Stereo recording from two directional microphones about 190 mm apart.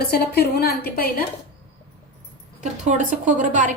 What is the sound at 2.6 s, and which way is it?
A woman's voice, 40° right (ahead or behind).